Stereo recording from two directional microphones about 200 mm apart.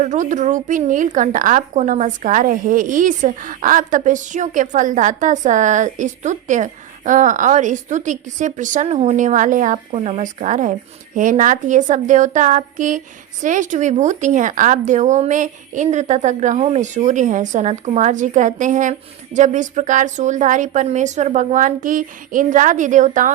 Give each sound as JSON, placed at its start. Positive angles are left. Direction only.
{"t": 0.0, "sound": "a woman's voice", "side_deg": -40}